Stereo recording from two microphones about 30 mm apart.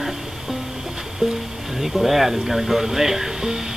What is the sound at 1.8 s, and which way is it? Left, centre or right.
Speech, centre.